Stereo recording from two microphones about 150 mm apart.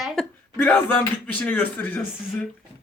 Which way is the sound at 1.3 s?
10° left (ahead or behind).